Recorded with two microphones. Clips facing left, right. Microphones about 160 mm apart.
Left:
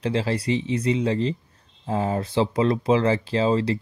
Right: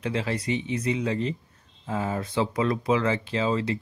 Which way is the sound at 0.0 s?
30° left (ahead or behind).